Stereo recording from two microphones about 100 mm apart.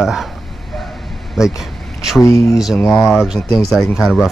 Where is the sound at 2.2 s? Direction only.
30° left (ahead or behind).